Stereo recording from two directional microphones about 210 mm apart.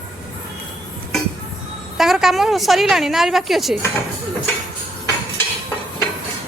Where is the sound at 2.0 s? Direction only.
Centre (ahead or behind).